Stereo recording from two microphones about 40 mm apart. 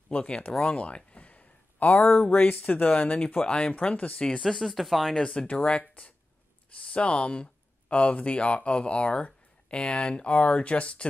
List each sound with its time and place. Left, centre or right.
0.1 s speech: left
0.7 s a sound: left
2.3 s speech: left
3.8 s speech: left
4.4 s speech: centre
5.2 s speech: left